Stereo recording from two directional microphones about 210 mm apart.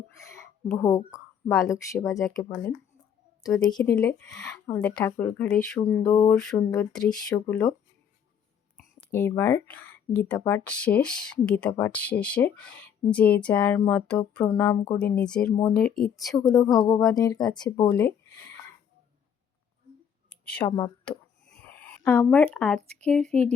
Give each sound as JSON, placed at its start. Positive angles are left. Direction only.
{"t": 0.2, "sound": "a sound", "side_deg": 15}
{"t": 2.0, "sound": "speech", "side_deg": 15}
{"t": 3.6, "sound": "speech", "side_deg": 20}
{"t": 3.9, "sound": "speech", "side_deg": 5}
{"t": 8.8, "sound": "speech", "side_deg": 10}
{"t": 16.4, "sound": "speech", "side_deg": 15}
{"t": 17.8, "sound": "speech", "side_deg": 5}
{"t": 20.3, "sound": "a sound", "side_deg": 5}
{"t": 22.5, "sound": "speech", "side_deg": 5}